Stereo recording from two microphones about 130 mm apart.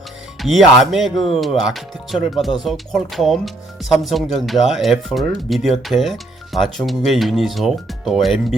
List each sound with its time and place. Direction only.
0.3 s speech: centre (ahead or behind)
1.1 s speech: 40° left (ahead or behind)
1.4 s speech: centre (ahead or behind)